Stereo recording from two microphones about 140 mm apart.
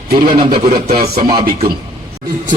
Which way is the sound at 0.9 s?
90° right.